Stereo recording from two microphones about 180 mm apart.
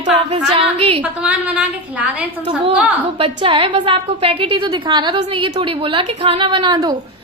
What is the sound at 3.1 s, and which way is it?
A woman's voice, 30° right (ahead or behind).